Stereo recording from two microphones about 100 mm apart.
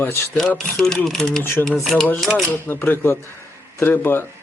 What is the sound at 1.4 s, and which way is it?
Speech, 20° left (ahead or behind).